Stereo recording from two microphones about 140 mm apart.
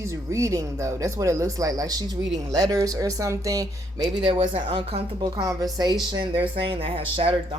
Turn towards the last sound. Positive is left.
turn(degrees=-40)  # may be behind; listen again after turning